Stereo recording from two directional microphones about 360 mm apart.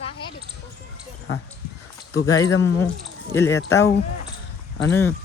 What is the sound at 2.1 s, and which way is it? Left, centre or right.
Speech, left.